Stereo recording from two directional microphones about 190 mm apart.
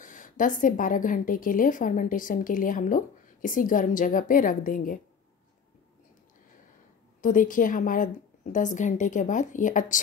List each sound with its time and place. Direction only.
0.0 s a woman's voice: 45° left (ahead or behind)
7.2 s a woman's voice: 45° left (ahead or behind)